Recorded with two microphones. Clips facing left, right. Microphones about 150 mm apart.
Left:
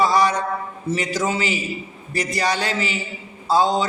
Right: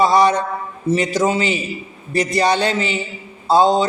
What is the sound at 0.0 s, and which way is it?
A man's voice, 25° right (ahead or behind).